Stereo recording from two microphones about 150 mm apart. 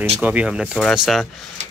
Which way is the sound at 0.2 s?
10° right (ahead or behind).